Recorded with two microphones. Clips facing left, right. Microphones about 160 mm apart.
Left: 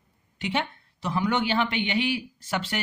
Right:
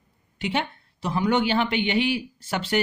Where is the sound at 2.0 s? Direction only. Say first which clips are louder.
Right 3 dB; centre (ahead or behind).